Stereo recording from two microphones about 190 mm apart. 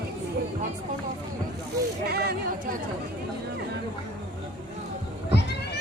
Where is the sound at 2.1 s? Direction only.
55° right (ahead or behind).